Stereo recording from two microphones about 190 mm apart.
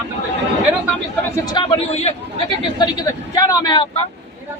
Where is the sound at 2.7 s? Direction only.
20° left (ahead or behind).